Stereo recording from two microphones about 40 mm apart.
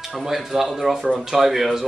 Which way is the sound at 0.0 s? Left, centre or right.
Centre.